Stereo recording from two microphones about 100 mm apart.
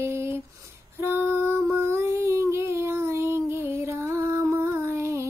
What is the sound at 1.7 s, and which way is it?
Child singing, 25° right (ahead or behind).